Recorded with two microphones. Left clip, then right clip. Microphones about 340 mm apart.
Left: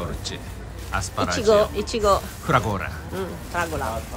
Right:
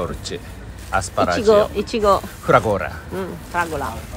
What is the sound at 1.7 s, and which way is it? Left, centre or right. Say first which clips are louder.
Speech: right 3 dB; right.